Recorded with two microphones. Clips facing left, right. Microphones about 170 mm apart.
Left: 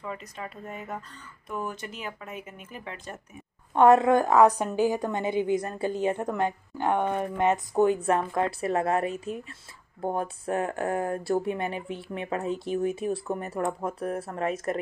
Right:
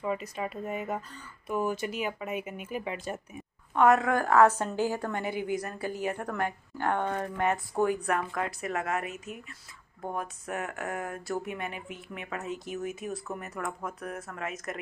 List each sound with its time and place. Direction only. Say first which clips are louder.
0.0 s speech: right 5 dB; 15° right (ahead or behind)
3.7 s a woman's voice: left 5 dB; 30° left (ahead or behind)